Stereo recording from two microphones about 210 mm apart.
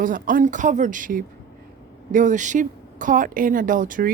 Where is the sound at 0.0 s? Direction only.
40° right (ahead or behind).